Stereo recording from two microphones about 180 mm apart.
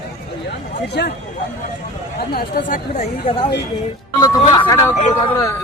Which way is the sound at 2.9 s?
35° left (ahead or behind).